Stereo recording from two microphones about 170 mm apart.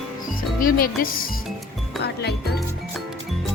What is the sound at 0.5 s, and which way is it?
Music, 55° left (ahead or behind).